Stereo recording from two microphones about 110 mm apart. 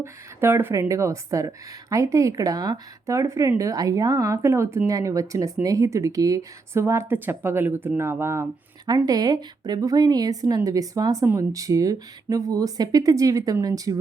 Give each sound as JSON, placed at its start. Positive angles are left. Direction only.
{"t": 0.0, "sound": "a woman's voice", "side_deg": -20}
{"t": 9.0, "sound": "speech", "side_deg": -35}